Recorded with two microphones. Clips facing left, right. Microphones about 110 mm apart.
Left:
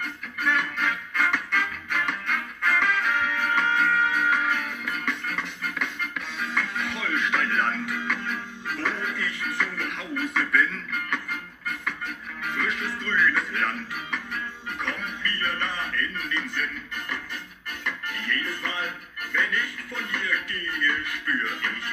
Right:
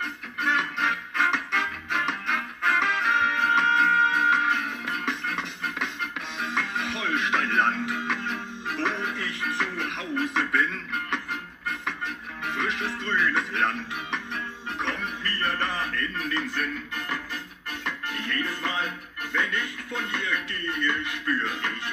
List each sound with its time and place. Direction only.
0.0 s music: 25° right (ahead or behind)
12.4 s music: 25° right (ahead or behind)
17.8 s music: 30° right (ahead or behind)